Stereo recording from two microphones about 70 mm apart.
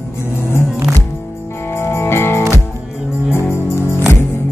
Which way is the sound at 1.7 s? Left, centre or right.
Left.